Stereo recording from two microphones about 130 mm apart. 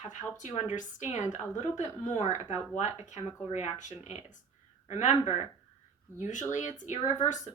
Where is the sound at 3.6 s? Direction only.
55° left (ahead or behind).